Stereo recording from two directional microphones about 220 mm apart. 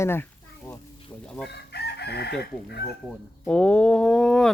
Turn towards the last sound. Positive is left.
turn(degrees=5)  # may be behind; listen again after turning